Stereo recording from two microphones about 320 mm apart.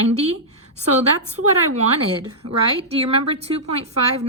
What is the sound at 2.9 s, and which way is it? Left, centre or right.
A woman's voice, centre.